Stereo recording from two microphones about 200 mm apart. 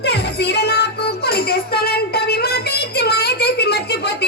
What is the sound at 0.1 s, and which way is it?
Music, 55° left (ahead or behind).